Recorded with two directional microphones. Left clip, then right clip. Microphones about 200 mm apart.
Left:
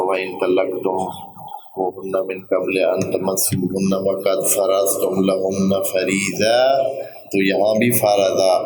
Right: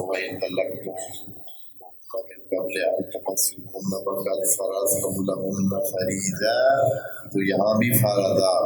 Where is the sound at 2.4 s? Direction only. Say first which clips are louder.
Left 5 dB; 40° left (ahead or behind).